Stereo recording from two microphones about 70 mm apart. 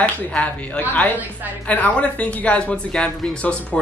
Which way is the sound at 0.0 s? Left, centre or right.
Left.